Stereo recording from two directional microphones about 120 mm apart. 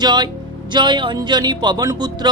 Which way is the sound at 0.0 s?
35° right (ahead or behind).